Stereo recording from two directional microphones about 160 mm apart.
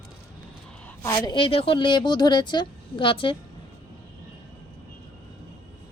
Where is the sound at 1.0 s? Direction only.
25° left (ahead or behind).